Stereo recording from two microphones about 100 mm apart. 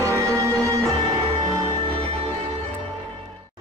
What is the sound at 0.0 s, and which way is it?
Music, 30° right (ahead or behind).